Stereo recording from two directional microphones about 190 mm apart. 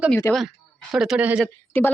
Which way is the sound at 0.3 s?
Centre (ahead or behind).